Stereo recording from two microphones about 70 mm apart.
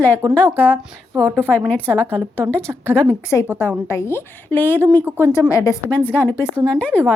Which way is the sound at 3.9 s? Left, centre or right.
Left.